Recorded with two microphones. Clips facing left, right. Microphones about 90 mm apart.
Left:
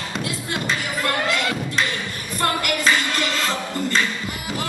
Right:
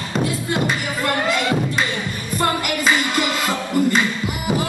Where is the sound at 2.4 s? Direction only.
10° right (ahead or behind).